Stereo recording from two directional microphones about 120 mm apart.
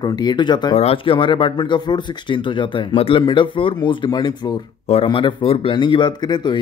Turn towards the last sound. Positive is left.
turn(degrees=40)  # may be behind; listen again after turning